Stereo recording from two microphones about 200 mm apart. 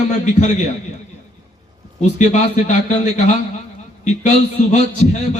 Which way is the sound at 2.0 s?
35° left (ahead or behind).